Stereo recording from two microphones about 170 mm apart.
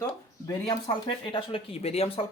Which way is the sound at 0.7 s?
30° left (ahead or behind).